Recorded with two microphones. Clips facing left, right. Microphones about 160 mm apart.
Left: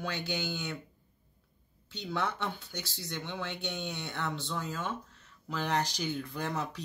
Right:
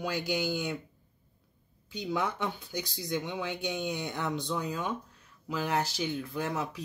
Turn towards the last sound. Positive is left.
turn(degrees=-5)  # may be behind; listen again after turning